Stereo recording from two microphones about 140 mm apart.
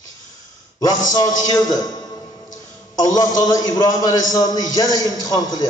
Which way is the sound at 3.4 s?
30° left (ahead or behind).